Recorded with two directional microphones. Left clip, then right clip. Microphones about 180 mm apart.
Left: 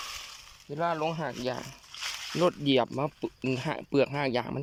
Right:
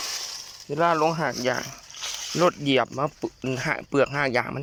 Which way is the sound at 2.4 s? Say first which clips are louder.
Right 4 dB; 15° left (ahead or behind).